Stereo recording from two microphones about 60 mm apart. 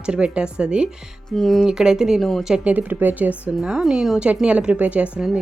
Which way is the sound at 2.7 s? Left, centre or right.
Right.